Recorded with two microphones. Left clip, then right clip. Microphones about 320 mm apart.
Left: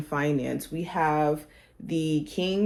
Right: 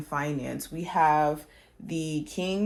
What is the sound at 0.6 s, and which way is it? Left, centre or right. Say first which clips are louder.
Speech: right 3 dB; right.